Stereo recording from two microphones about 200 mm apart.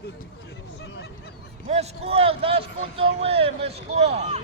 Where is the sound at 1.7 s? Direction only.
30° right (ahead or behind).